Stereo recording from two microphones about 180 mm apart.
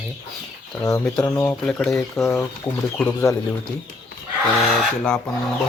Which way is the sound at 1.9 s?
15° left (ahead or behind).